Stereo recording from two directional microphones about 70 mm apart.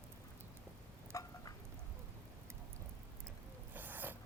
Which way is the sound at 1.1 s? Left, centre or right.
Left.